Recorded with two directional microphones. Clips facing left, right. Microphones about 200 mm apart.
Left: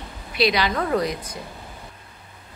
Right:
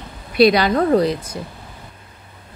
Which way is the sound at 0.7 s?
35° right (ahead or behind).